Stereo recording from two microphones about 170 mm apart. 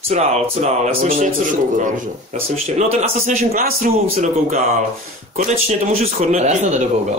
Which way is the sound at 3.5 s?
55° right (ahead or behind).